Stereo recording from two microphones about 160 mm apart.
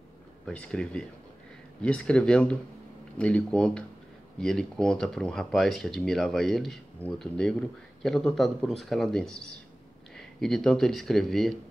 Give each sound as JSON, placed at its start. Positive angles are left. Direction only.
{"t": 0.5, "sound": "speech", "side_deg": 5}